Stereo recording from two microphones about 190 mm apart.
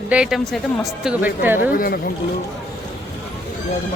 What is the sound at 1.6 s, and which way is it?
Speech, 50° left (ahead or behind).